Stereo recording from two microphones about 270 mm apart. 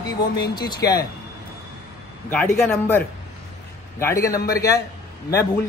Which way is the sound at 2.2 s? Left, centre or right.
Centre.